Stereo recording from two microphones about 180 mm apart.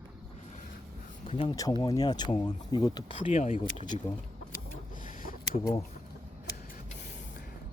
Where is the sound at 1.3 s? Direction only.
30° left (ahead or behind).